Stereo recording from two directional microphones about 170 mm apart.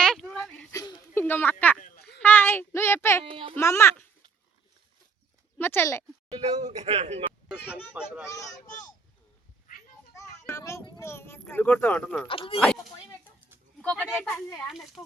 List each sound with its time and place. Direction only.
0.0 s a sound: 5° left (ahead or behind)
0.7 s a sound: 20° left (ahead or behind)
1.2 s a woman's voice: 10° left (ahead or behind)
3.2 s speech: 30° right (ahead or behind)
3.5 s a woman's voice: 15° left (ahead or behind)
5.5 s a woman's voice: 15° left (ahead or behind)
6.2 s speech: 35° right (ahead or behind)
7.4 s speech: 5° right (ahead or behind)
10.4 s speech: 15° left (ahead or behind)
12.3 s speech: 30° left (ahead or behind)
13.8 s a woman's voice: 5° left (ahead or behind)